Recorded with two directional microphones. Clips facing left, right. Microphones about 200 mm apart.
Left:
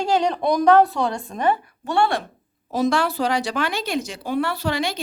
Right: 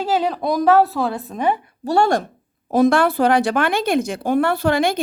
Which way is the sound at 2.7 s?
55° right (ahead or behind).